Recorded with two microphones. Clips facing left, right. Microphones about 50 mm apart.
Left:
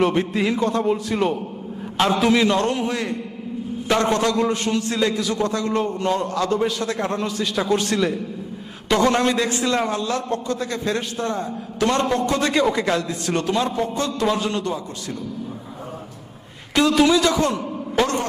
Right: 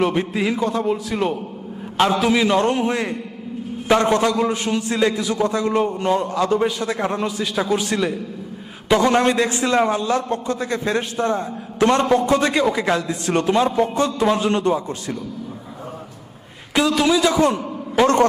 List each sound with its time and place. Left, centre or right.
0.0 s a man's voice: centre
2.5 s a man's voice: centre
9.2 s a man's voice: right
12.0 s a man's voice: centre
13.1 s a man's voice: centre
14.5 s a man's voice: right
16.7 s a man's voice: centre